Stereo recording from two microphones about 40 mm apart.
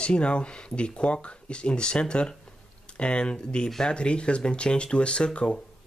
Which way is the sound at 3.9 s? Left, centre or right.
Left.